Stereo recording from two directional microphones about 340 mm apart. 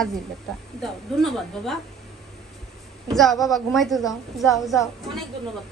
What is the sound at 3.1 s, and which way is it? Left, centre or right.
A woman's voice, centre.